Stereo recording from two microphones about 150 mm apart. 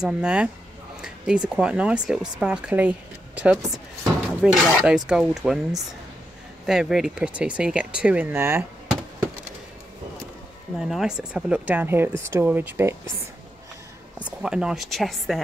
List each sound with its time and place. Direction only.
0.0 s speech: 5° right (ahead or behind)
10.8 s speech: 5° right (ahead or behind)
14.1 s speech: 5° right (ahead or behind)